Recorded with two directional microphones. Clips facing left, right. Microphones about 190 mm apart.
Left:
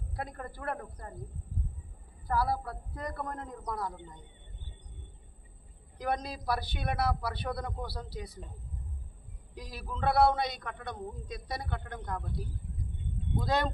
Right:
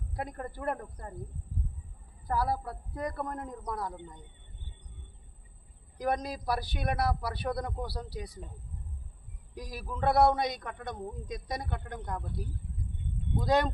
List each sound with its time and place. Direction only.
0.2 s a man's voice: 15° right (ahead or behind)
2.2 s a man's voice: 15° right (ahead or behind)
6.0 s a man's voice: 15° right (ahead or behind)
9.6 s a man's voice: 15° right (ahead or behind)
13.3 s a man's voice: 15° right (ahead or behind)